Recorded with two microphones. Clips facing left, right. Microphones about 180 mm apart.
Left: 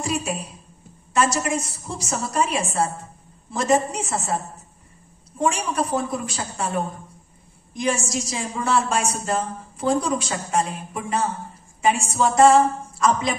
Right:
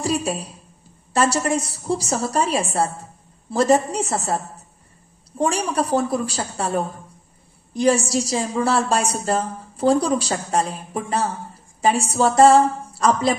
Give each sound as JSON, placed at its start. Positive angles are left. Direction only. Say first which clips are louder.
{"t": 0.0, "sound": "a woman's voice", "louder": "right 3 dB", "side_deg": -30}
{"t": 5.4, "sound": "a woman's voice", "louder": "right 2 dB", "side_deg": -35}